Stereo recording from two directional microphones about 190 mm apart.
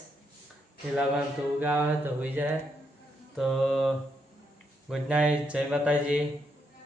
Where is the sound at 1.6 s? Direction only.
10° right (ahead or behind).